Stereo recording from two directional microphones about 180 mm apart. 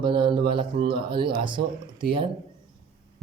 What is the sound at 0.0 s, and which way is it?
Speech, 25° right (ahead or behind).